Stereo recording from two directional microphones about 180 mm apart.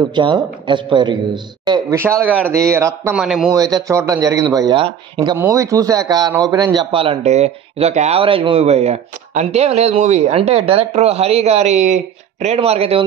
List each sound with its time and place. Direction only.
0.1 s a man's voice: 25° right (ahead or behind)
1.7 s speech: 15° right (ahead or behind)
3.2 s a man's voice: 5° right (ahead or behind)
3.5 s a man's voice: 20° right (ahead or behind)